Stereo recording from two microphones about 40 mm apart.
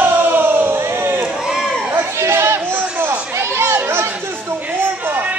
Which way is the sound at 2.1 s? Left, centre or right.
Right.